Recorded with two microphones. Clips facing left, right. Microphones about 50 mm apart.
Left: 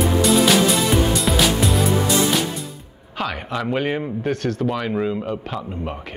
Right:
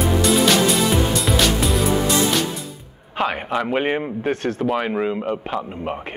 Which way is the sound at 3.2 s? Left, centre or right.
Right.